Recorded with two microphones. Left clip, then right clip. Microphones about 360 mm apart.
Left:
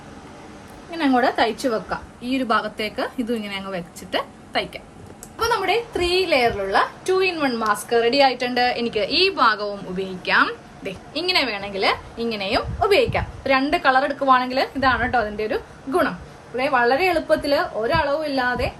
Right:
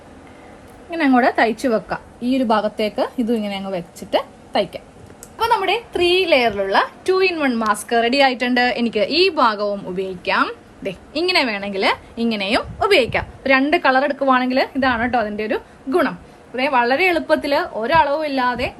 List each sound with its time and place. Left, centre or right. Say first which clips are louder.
0.9 s a woman's voice: right 3 dB; centre
2.2 s a woman's voice: right 4 dB; centre
5.4 s a woman's voice: right 3 dB; centre